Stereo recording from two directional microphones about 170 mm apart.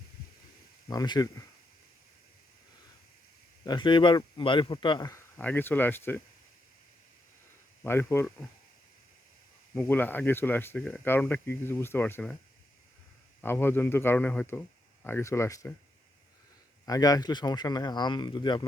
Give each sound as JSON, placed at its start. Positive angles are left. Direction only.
{"t": 0.9, "sound": "speech", "side_deg": 25}
{"t": 3.6, "sound": "speech", "side_deg": 25}
{"t": 7.9, "sound": "speech", "side_deg": 15}
{"t": 9.7, "sound": "speech", "side_deg": 10}
{"t": 13.4, "sound": "speech", "side_deg": 15}
{"t": 16.8, "sound": "speech", "side_deg": 20}